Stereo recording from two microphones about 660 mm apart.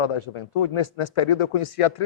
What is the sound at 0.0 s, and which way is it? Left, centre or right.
A man's voice, left.